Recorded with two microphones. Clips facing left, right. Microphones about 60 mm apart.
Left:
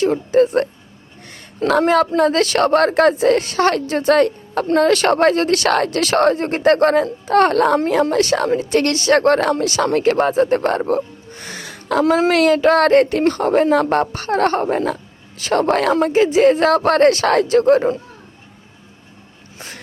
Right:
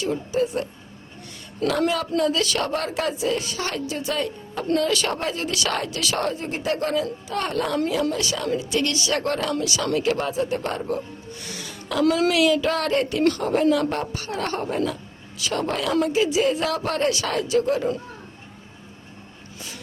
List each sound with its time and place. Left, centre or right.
0.0 s a woman's voice: left
1.2 s a sound: left
2.1 s a woman's voice: left
12.0 s speech: left
12.3 s a woman's voice: left
19.5 s a sound: left